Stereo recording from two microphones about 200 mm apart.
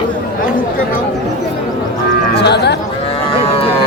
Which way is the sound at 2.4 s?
55° left (ahead or behind).